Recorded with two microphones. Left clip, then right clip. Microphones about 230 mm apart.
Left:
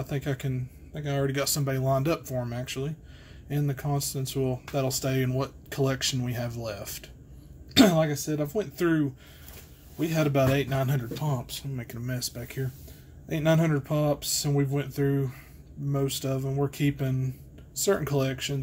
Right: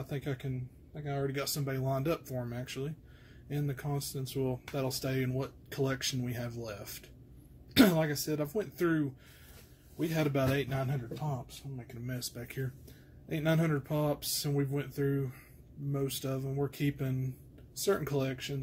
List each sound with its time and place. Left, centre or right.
0.0 s speech: centre
0.9 s speech: centre
11.1 s speech: left
12.1 s speech: centre